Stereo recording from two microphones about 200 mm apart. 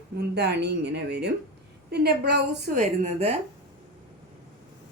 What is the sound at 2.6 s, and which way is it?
Speech, 35° right (ahead or behind).